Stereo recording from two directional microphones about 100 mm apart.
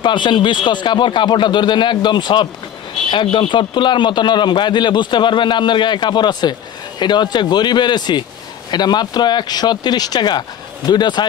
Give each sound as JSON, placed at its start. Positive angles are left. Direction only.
{"t": 0.0, "sound": "a man's voice", "side_deg": 50}